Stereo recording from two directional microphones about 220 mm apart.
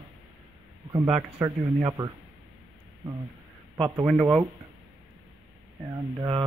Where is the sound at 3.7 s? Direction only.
15° right (ahead or behind).